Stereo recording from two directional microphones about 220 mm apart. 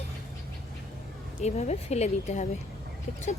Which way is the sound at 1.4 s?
30° left (ahead or behind).